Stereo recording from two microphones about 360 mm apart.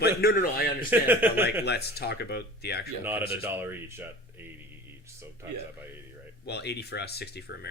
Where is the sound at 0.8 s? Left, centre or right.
Centre.